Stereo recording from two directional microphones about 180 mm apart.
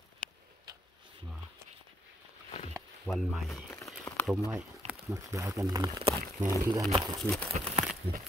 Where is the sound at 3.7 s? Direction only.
15° left (ahead or behind).